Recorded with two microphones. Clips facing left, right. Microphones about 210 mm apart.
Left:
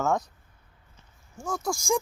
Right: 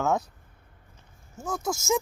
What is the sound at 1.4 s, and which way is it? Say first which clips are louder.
Speech: even; centre (ahead or behind).